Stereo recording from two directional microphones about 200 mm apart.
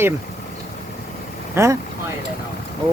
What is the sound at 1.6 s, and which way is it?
Speech, 15° right (ahead or behind).